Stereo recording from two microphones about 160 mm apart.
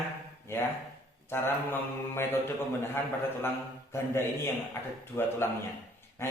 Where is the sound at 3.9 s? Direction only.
15° left (ahead or behind).